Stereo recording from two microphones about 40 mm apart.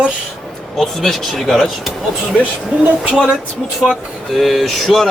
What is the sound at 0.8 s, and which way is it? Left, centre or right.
Speech, centre.